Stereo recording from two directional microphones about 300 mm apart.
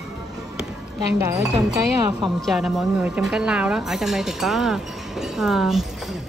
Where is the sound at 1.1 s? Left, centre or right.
Centre.